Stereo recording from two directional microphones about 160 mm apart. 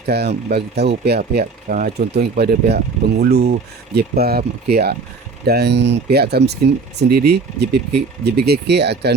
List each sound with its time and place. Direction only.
0.0 s speech: 90° right
3.9 s speech: 75° right (ahead or behind)